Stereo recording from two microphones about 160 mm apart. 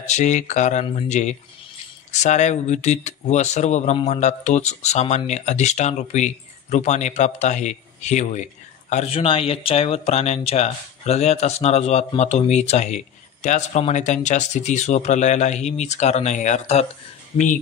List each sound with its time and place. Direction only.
0.0 s speech: 45° left (ahead or behind)